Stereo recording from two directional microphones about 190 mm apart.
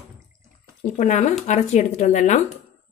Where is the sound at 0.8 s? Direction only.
40° left (ahead or behind).